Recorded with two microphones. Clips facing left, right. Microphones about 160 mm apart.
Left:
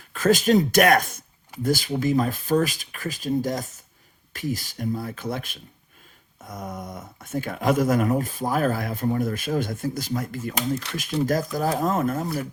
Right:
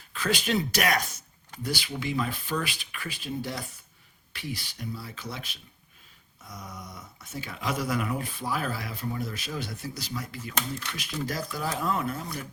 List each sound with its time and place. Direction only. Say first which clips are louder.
0.1 s speech: left 9 dB; 45° left (ahead or behind)